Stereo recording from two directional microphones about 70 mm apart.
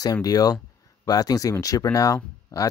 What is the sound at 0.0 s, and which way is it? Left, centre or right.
Speech, left.